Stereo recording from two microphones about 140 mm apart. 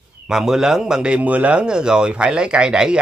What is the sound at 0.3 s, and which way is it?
Speech, 5° right (ahead or behind).